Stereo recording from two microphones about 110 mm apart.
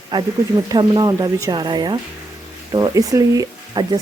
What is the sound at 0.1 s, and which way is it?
Speech, 40° right (ahead or behind).